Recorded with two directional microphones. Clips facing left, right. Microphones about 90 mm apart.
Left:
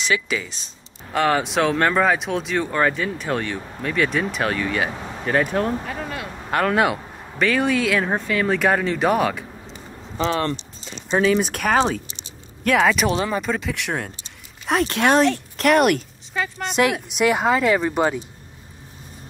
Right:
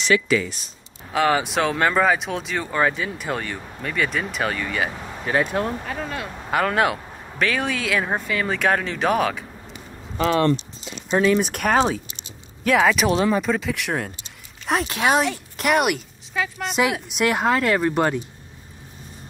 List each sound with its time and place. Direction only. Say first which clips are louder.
0.0 s speech: right 4 dB; 20° left (ahead or behind)
1.1 s speech: even; centre (ahead or behind)
6.5 s speech: left 1 dB; centre (ahead or behind)
11.1 s speech: even; centre (ahead or behind)